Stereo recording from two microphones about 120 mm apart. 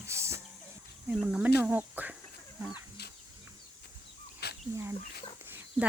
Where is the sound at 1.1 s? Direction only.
10° right (ahead or behind).